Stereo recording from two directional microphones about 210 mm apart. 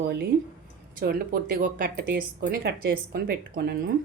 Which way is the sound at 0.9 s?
45° right (ahead or behind).